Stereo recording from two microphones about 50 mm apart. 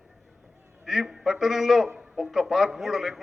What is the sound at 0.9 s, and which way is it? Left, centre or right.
A man's voice, centre.